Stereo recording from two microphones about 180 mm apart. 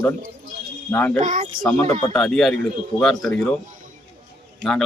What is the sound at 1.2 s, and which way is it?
Speech, 45° right (ahead or behind).